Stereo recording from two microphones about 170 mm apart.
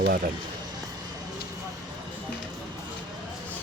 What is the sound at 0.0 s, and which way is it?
Speech, 60° right (ahead or behind).